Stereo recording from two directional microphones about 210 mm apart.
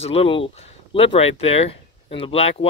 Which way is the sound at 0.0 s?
25° left (ahead or behind).